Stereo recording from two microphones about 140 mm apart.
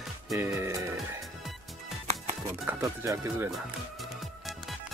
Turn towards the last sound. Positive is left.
turn(degrees=-20)  # may be behind; listen again after turning